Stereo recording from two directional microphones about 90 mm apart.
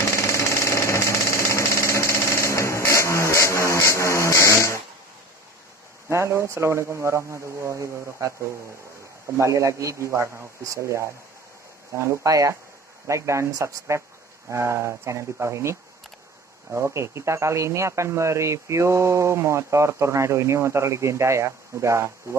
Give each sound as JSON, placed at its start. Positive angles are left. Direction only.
{"t": 0.1, "sound": "engine", "side_deg": 30}
{"t": 6.0, "sound": "speech", "side_deg": -30}
{"t": 9.4, "sound": "speech", "side_deg": -35}